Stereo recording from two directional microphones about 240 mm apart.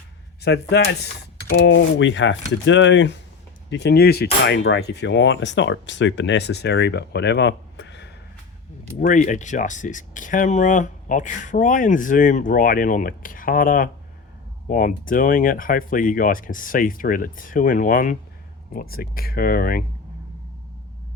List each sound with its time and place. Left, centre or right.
0.4 s speech: left
9.0 s speech: left